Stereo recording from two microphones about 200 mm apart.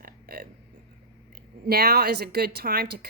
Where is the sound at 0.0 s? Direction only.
50° right (ahead or behind).